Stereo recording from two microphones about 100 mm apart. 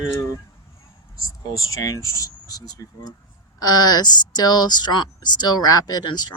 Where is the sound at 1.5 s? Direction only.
35° left (ahead or behind).